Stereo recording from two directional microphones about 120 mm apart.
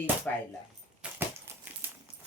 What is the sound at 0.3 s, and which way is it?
Speech, 15° left (ahead or behind).